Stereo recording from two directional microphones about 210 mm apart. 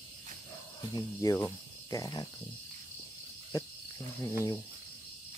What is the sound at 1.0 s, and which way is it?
Speech, 15° left (ahead or behind).